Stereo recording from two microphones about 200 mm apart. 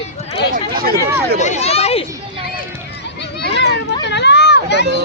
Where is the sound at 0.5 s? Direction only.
50° right (ahead or behind).